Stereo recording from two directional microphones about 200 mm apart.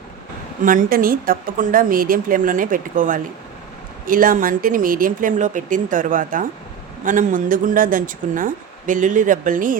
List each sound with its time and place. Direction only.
0.6 s a woman's voice: 40° right (ahead or behind)